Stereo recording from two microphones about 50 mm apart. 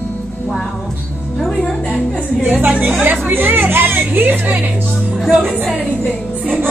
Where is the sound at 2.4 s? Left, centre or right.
Right.